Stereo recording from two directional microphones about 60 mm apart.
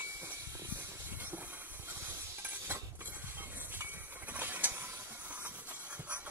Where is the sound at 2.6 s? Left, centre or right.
Right.